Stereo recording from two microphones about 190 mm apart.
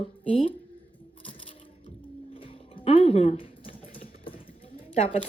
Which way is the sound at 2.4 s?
30° left (ahead or behind).